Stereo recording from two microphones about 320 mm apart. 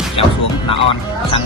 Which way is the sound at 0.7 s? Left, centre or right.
Centre.